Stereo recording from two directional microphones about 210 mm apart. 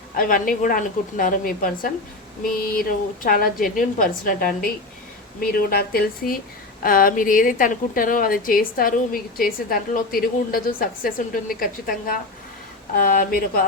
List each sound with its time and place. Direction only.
0.2 s a woman's voice: 40° left (ahead or behind)
3.2 s a woman's voice: 40° left (ahead or behind)